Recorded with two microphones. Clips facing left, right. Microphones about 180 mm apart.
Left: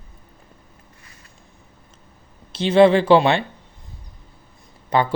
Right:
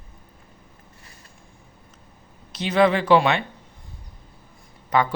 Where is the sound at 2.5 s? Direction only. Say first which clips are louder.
Left 6 dB; 30° left (ahead or behind).